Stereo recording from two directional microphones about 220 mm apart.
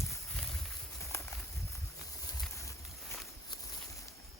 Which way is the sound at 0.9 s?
15° left (ahead or behind).